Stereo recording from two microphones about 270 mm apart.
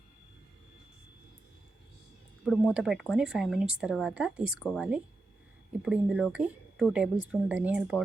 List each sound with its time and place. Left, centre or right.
2.4 s speech: centre